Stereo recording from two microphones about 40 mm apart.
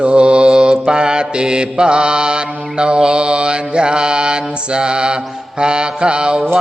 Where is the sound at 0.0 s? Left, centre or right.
Right.